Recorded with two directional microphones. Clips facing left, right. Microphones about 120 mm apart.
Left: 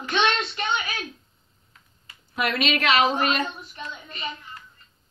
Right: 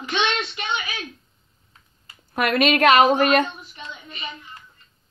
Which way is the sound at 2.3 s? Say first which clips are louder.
Right 5 dB; 50° right (ahead or behind).